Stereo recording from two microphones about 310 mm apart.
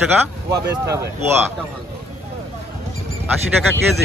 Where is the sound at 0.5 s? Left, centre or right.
Centre.